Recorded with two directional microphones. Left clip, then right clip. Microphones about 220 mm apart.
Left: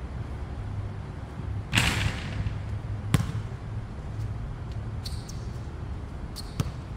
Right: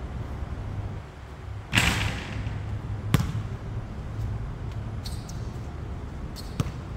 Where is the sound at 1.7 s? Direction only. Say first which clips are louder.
Right 2 dB; 5° right (ahead or behind).